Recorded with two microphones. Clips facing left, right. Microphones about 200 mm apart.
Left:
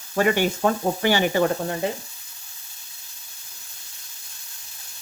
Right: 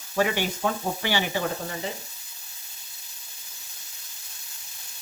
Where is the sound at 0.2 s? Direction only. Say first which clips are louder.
Left 5 dB; 50° left (ahead or behind).